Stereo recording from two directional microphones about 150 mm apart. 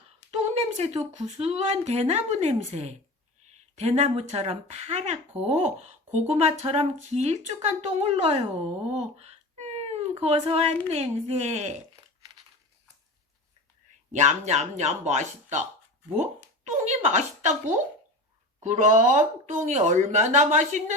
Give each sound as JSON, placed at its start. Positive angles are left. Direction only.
{"t": 0.3, "sound": "speech", "side_deg": -45}
{"t": 8.9, "sound": "a sound", "side_deg": -45}
{"t": 10.8, "sound": "speech", "side_deg": -45}
{"t": 14.1, "sound": "speech", "side_deg": -50}
{"t": 18.6, "sound": "speech", "side_deg": -55}